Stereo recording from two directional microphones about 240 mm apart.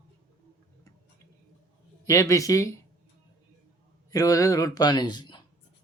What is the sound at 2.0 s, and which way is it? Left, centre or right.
Speech, centre.